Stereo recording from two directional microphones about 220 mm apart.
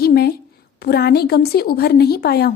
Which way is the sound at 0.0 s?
45° left (ahead or behind).